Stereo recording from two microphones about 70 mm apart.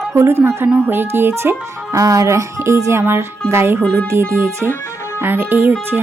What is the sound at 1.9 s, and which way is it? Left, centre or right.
Music, right.